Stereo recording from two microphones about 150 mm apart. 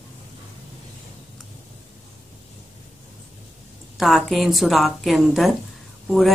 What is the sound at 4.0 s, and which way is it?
Speech, centre (ahead or behind).